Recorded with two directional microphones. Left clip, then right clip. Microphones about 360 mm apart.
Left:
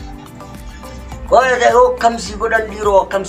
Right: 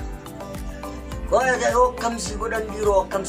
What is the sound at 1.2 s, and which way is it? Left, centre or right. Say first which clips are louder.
Speech: left 9 dB; left.